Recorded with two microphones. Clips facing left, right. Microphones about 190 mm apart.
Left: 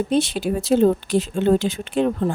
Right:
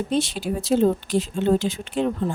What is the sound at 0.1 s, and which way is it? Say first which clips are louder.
A woman's voice: left 3 dB; 60° left (ahead or behind).